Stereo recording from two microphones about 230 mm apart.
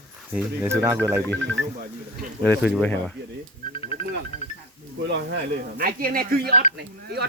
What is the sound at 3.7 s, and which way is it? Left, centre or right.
Music, left.